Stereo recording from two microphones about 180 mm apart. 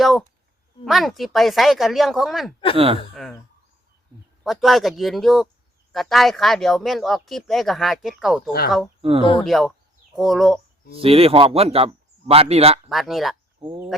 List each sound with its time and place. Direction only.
0.0 s speech: centre (ahead or behind)
2.7 s speech: 30° right (ahead or behind)
3.2 s speech: 5° left (ahead or behind)
4.4 s speech: centre (ahead or behind)
9.0 s speech: 35° right (ahead or behind)
9.4 s speech: centre (ahead or behind)
11.0 s speech: 30° right (ahead or behind)
12.9 s speech: centre (ahead or behind)